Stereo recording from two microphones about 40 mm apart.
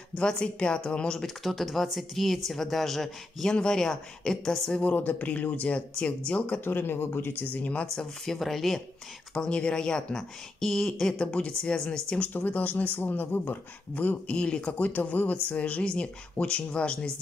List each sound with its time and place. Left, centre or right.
0.1 s speech: centre
1.2 s speech: centre
3.5 s speech: centre
4.9 s speech: left
6.6 s speech: left
7.5 s speech: left
7.8 s speech: centre
8.4 s speech: centre
9.3 s speech: left
11.3 s speech: left
11.7 s speech: centre
12.3 s speech: left
12.5 s speech: left